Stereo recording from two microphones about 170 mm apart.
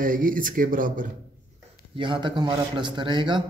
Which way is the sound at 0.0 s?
55° right (ahead or behind).